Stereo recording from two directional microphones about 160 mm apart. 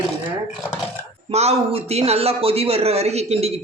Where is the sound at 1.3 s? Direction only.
40° right (ahead or behind).